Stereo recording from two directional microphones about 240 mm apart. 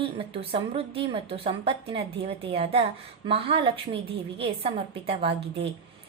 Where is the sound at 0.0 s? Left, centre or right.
Right.